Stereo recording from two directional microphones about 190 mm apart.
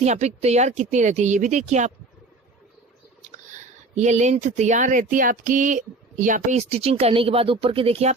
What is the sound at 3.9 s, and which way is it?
Speech, 35° right (ahead or behind).